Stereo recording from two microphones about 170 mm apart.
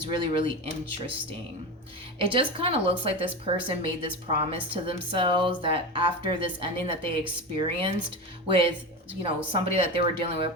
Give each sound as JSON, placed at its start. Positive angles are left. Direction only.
{"t": 0.0, "sound": "speech", "side_deg": -30}